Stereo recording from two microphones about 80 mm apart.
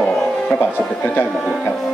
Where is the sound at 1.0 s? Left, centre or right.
Left.